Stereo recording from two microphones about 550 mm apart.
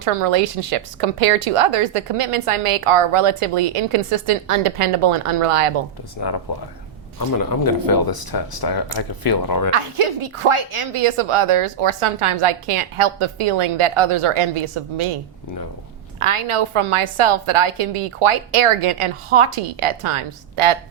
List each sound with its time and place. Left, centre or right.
0.0 s speech: right
6.5 s speech: left
9.7 s speech: right
16.2 s speech: right